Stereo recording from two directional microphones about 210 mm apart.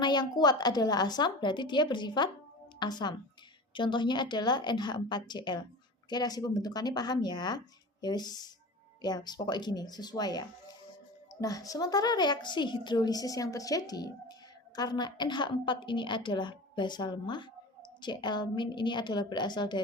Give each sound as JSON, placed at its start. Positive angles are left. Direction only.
{"t": 0.0, "sound": "a woman's voice", "side_deg": 20}